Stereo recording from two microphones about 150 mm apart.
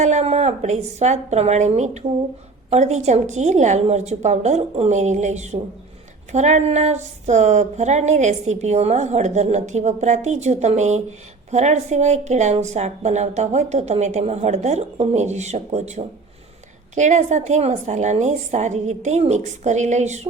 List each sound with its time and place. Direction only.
0.0 s speech: 50° right (ahead or behind)